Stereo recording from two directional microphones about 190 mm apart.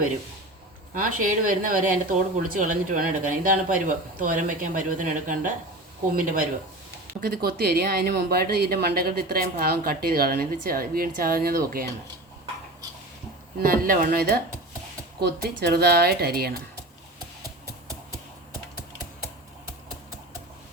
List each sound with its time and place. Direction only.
0.9 s speech: 45° right (ahead or behind)
13.6 s speech: 50° right (ahead or behind)